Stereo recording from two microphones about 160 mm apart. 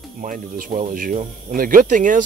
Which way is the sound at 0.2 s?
60° right (ahead or behind).